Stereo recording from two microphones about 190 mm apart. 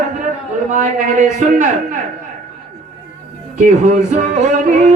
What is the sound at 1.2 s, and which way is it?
Speech, 40° right (ahead or behind).